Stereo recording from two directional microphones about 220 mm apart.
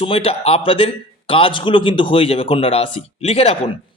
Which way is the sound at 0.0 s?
25° left (ahead or behind).